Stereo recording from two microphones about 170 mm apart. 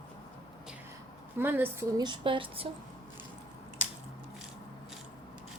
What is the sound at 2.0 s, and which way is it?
Speech, 30° right (ahead or behind).